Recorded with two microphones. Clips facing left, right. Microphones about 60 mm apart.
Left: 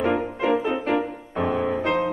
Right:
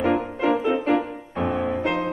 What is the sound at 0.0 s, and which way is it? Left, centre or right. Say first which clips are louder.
French horn: right 1 dB; centre.